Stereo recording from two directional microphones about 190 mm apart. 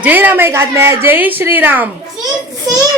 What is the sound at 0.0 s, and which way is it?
A woman's voice, 10° right (ahead or behind).